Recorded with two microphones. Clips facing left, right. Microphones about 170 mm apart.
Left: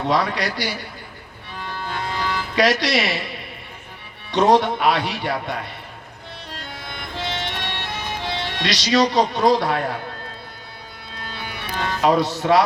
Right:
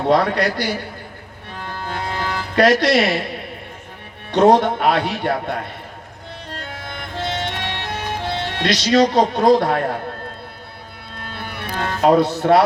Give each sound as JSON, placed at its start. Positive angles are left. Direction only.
{"t": 0.1, "sound": "speech", "side_deg": -55}
{"t": 1.5, "sound": "music", "side_deg": -50}
{"t": 4.3, "sound": "speech", "side_deg": -55}
{"t": 6.5, "sound": "music", "side_deg": -50}
{"t": 11.1, "sound": "music", "side_deg": -50}